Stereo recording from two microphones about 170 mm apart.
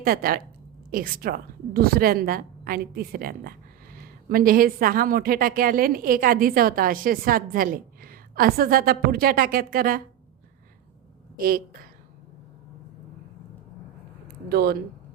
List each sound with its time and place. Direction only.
0.0 s a woman's voice: 60° right (ahead or behind)
11.3 s a woman's voice: 60° right (ahead or behind)
14.3 s a sound: 65° right (ahead or behind)